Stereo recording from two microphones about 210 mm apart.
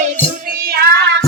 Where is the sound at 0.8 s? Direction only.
50° right (ahead or behind).